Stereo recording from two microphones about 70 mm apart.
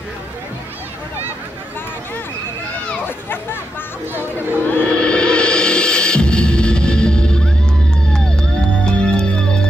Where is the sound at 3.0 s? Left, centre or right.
Left.